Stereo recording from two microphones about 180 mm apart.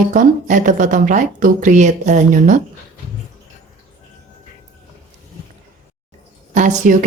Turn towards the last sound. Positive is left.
turn(degrees=-45)  # may be behind; listen again after turning